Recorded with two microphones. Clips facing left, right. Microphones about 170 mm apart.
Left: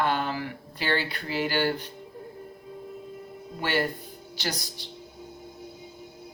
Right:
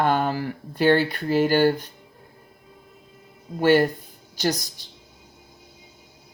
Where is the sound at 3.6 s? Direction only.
45° right (ahead or behind).